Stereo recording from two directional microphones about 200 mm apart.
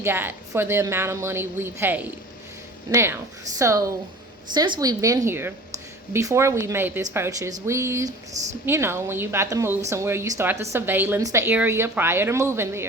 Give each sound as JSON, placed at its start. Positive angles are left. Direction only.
{"t": 0.0, "sound": "a woman's voice", "side_deg": -10}